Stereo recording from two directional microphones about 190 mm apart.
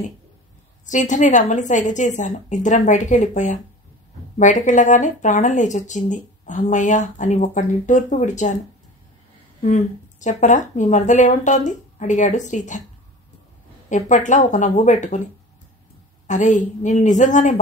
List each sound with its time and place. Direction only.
0.8 s speech: 40° left (ahead or behind)
10.2 s speech: 40° left (ahead or behind)
13.8 s speech: 40° left (ahead or behind)
16.3 s speech: 40° left (ahead or behind)